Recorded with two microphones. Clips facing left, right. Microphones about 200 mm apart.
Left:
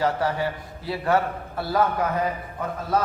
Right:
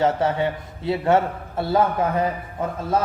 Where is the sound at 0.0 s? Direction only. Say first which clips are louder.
Right 3 dB; 25° right (ahead or behind).